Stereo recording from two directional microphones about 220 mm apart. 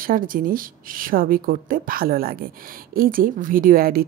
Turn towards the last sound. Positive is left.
turn(degrees=-40)  # may be behind; listen again after turning